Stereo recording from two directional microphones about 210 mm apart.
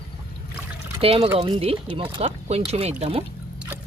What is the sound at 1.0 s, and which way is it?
Speech, 25° right (ahead or behind).